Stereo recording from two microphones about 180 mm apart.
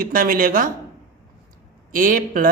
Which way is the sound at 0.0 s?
50° right (ahead or behind).